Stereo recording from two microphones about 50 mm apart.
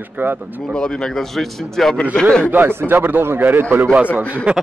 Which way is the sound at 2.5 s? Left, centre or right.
Right.